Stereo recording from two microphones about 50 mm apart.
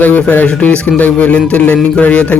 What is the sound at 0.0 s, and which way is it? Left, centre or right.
Speech, left.